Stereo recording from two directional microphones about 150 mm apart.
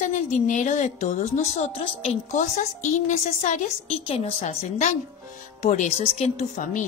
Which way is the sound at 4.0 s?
40° left (ahead or behind).